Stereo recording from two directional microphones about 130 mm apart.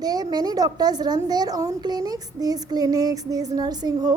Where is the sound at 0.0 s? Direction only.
30° right (ahead or behind).